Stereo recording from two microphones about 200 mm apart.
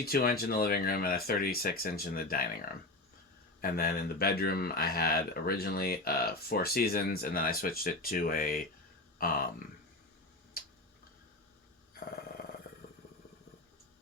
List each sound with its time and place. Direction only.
0.0 s speech: 50° left (ahead or behind)
10.5 s tick-tock: 50° left (ahead or behind)